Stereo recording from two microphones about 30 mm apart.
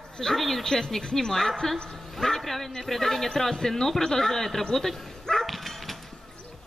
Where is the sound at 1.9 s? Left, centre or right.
Centre.